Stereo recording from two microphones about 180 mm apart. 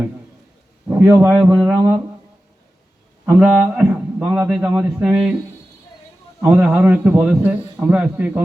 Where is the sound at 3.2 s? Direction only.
10° right (ahead or behind).